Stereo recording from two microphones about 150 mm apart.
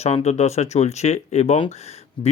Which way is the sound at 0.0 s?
45° left (ahead or behind).